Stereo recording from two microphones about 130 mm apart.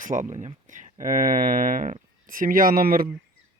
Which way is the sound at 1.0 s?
90° right.